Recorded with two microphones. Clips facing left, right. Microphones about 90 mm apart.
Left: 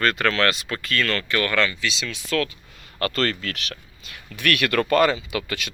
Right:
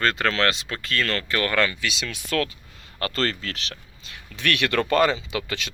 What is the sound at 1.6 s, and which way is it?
Speech, 50° right (ahead or behind).